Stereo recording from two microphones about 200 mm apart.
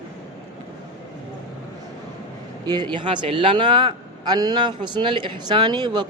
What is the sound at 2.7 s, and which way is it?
A man's voice, 20° right (ahead or behind).